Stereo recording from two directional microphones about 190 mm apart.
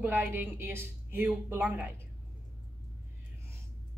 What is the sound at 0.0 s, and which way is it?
Speech, 10° right (ahead or behind).